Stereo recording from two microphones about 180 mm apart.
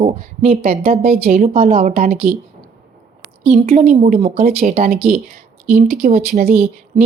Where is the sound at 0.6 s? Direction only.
55° right (ahead or behind); by 1.8 s 35° right (ahead or behind).